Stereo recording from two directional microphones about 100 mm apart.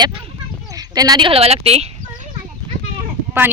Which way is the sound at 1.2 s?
85° right.